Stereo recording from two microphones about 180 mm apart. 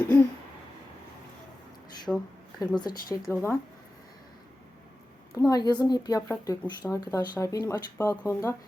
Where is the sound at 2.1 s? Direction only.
Centre (ahead or behind).